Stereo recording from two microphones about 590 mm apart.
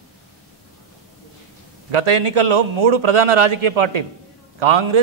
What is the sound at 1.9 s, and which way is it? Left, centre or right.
A man's voice, right.